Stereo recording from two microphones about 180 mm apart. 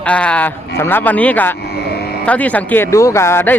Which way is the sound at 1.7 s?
60° left (ahead or behind).